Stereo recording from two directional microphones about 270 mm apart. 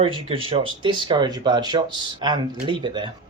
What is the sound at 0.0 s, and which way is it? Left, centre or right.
Speech, right.